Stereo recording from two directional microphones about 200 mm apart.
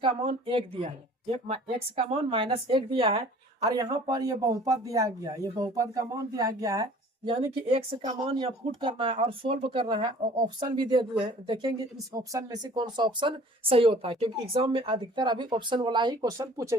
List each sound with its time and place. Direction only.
0.0 s speech: 25° right (ahead or behind)
3.6 s speech: 15° right (ahead or behind)